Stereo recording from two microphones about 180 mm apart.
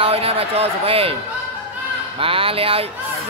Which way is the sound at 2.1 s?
30° right (ahead or behind).